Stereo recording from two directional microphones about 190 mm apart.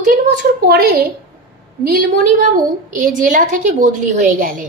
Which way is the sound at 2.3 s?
45° right (ahead or behind).